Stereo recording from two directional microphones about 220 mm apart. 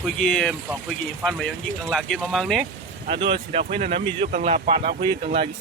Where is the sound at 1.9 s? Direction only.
Centre (ahead or behind).